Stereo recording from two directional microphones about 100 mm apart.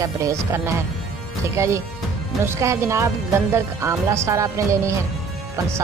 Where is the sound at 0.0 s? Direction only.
35° right (ahead or behind).